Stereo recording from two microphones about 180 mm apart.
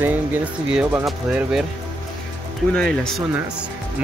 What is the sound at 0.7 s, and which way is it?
Speech, 5° right (ahead or behind).